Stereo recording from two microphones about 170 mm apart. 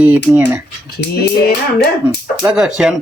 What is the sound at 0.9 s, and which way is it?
Speech, 75° left (ahead or behind).